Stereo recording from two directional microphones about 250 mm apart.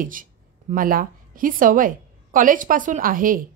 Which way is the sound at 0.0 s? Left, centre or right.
Right.